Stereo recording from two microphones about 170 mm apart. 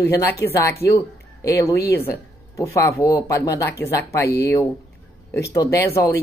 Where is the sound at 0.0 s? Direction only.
15° left (ahead or behind).